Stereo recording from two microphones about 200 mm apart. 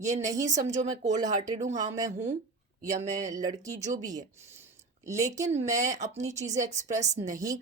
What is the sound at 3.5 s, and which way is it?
Speech, 15° right (ahead or behind).